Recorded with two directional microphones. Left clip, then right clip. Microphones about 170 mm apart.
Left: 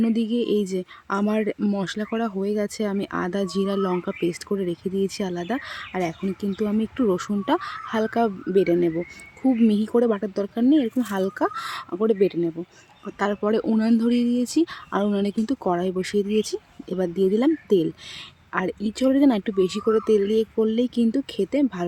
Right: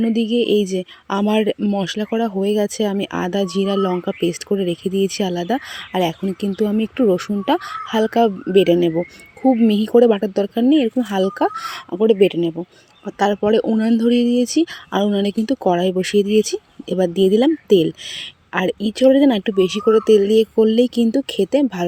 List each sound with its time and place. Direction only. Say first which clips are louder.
0.0 s speech: right 6 dB; 10° right (ahead or behind)
1.5 s speech: right 5 dB; 10° right (ahead or behind)